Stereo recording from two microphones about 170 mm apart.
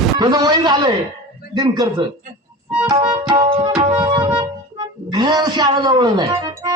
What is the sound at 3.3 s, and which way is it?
Tabla, 30° right (ahead or behind).